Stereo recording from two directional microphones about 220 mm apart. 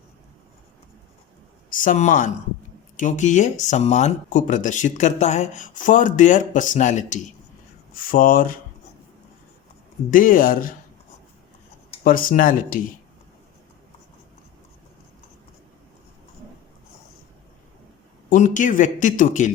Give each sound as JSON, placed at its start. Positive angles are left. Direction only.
{"t": 1.7, "sound": "speech", "side_deg": 35}
{"t": 10.1, "sound": "speech", "side_deg": 40}
{"t": 12.0, "sound": "speech", "side_deg": 40}
{"t": 18.3, "sound": "speech", "side_deg": 35}